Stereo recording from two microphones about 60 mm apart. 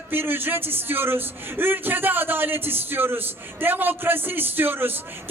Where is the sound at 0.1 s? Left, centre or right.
Right.